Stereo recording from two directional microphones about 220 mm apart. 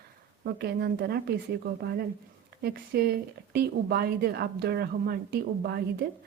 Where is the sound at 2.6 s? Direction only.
45° right (ahead or behind).